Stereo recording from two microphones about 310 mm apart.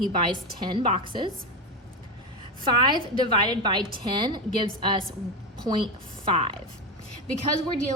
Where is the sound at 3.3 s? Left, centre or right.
Centre.